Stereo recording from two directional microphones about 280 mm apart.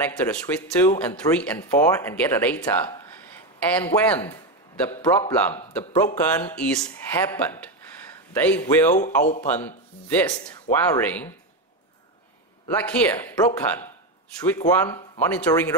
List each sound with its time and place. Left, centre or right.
0.0 s speech: centre
5.7 s speech: centre
9.2 s a man's voice: left
9.5 s speech: centre
12.6 s speech: centre
14.4 s speech: centre